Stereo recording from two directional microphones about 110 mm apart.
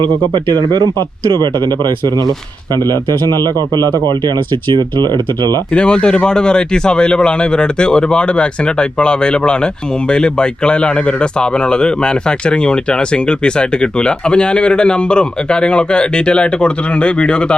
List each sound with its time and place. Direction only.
0.0 s speech: 40° right (ahead or behind)
5.7 s speech: 10° left (ahead or behind)